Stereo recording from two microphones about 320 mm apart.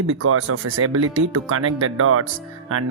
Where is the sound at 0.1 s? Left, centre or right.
Right.